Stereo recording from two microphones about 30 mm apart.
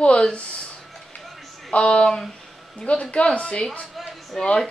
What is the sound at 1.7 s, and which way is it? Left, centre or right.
Speech, left.